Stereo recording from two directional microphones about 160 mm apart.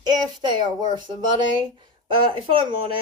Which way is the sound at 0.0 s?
25° right (ahead or behind).